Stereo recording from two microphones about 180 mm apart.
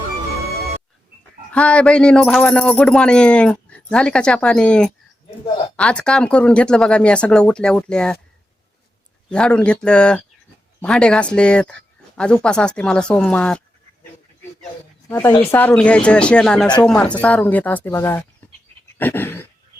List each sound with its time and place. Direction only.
1.5 s speech: 5° left (ahead or behind)
9.3 s speech: 5° left (ahead or behind)
15.4 s speech: 10° left (ahead or behind)